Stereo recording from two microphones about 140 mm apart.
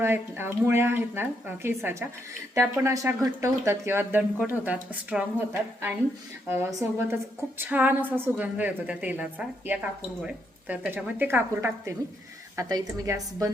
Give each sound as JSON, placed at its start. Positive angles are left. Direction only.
{"t": 0.0, "sound": "a woman's voice", "side_deg": -15}